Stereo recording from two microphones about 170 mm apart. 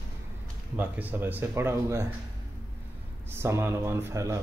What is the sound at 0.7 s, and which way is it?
A man's voice, 10° right (ahead or behind).